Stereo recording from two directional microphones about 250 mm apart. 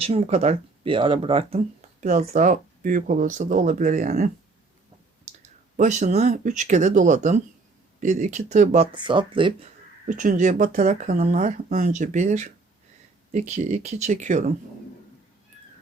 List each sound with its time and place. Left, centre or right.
0.0 s speech: right
5.4 s speech: right
10.1 s speech: right